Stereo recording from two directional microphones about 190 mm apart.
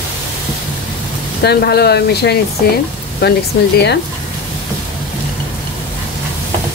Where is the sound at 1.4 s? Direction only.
60° left (ahead or behind).